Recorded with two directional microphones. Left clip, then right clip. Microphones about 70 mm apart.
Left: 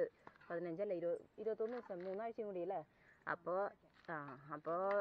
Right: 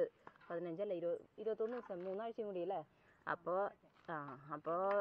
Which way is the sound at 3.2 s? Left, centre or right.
Left.